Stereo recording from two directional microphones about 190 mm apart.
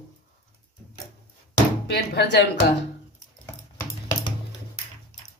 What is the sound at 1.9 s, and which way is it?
Speech, 60° left (ahead or behind).